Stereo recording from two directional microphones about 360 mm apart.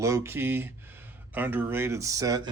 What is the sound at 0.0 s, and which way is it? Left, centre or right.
Speech, centre.